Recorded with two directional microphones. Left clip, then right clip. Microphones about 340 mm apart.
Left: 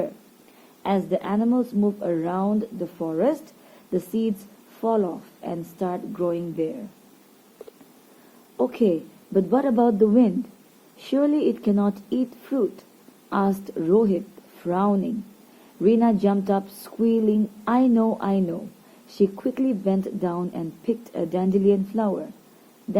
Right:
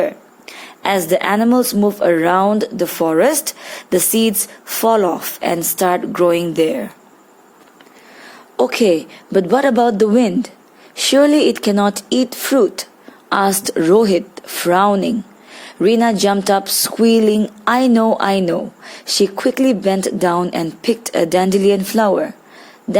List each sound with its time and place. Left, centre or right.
0.8 s speech: right
2.0 s speech: right
8.7 s speech: right